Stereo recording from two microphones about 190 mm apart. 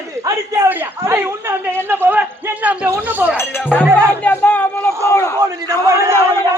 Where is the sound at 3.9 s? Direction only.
15° right (ahead or behind).